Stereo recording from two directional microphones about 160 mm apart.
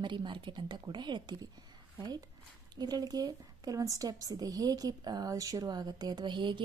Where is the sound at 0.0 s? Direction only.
30° right (ahead or behind).